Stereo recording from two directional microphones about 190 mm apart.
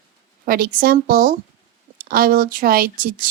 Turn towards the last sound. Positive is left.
turn(degrees=-50)  # may be behind; listen again after turning